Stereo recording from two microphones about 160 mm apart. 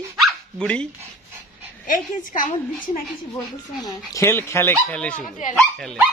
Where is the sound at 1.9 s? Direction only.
55° left (ahead or behind).